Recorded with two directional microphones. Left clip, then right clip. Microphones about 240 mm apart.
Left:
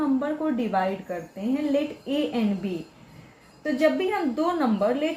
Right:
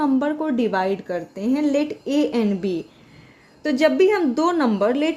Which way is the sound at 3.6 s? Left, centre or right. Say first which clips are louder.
Right 6 dB; right.